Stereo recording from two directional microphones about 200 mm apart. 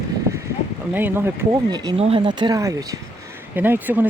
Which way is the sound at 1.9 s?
30° right (ahead or behind).